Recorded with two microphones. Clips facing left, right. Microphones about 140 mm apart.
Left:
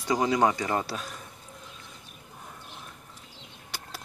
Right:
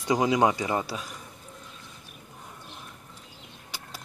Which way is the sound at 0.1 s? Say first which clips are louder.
Right 1 dB; 15° right (ahead or behind).